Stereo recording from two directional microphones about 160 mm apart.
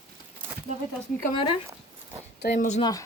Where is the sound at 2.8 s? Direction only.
25° left (ahead or behind).